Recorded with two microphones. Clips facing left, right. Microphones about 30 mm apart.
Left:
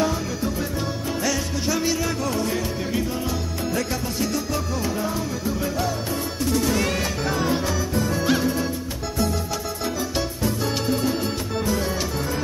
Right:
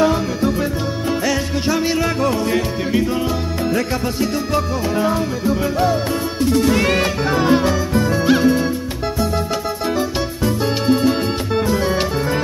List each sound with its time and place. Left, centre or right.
0.0 s music: right
5.4 s music: right
9.9 s music: right